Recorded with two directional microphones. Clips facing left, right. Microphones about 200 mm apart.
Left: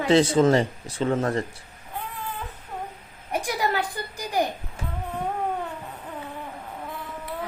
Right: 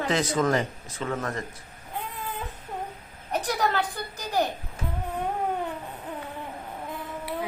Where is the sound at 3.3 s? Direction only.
10° left (ahead or behind).